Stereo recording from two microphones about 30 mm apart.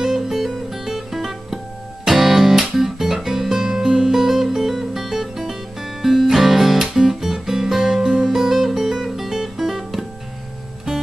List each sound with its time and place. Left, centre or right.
0.0 s music: centre
5.5 s guitar: centre
8.3 s music: centre